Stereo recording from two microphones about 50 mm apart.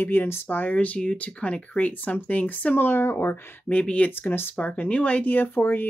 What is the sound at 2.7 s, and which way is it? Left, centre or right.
Speech, left.